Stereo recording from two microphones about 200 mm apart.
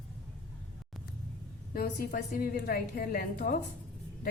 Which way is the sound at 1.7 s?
50° left (ahead or behind).